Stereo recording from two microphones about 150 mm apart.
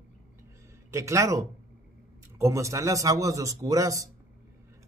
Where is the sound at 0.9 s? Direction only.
20° right (ahead or behind).